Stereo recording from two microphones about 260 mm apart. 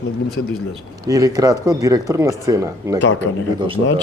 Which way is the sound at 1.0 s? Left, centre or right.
Centre.